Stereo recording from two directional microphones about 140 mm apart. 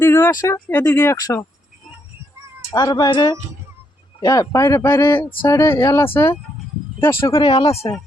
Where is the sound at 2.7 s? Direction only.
30° left (ahead or behind).